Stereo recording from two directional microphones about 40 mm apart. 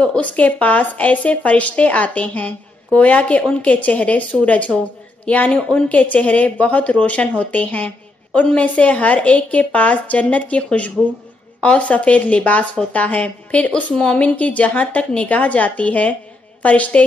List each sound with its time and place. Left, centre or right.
0.2 s a woman's voice: left
5.9 s a woman's voice: left